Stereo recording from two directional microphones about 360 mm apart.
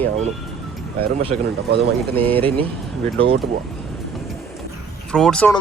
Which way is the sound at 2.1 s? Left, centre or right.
Centre.